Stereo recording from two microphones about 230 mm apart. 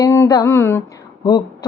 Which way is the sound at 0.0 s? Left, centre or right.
Centre.